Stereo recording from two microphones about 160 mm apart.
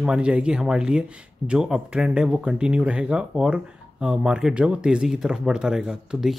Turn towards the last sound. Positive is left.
turn(degrees=-5)  # may be behind; listen again after turning